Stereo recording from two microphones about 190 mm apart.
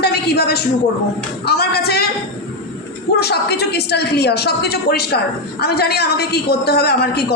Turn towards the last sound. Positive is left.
turn(degrees=60)  # may be behind; listen again after turning